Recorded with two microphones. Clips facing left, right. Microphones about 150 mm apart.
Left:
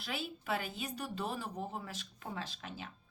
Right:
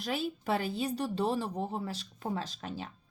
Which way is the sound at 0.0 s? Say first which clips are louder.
Right 8 dB; 40° right (ahead or behind).